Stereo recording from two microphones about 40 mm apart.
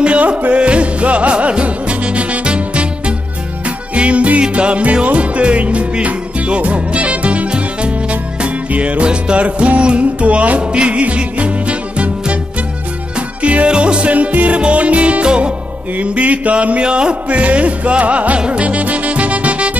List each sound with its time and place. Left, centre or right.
0.6 s music: right
10.6 s music: right
13.4 s music: right
16.0 s music: right